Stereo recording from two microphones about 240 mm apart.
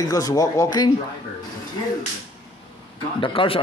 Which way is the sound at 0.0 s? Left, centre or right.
Centre.